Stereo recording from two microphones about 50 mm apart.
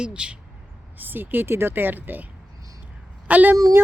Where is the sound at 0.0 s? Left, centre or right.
Centre.